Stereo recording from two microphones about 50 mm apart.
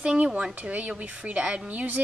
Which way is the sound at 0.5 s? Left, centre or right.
Right.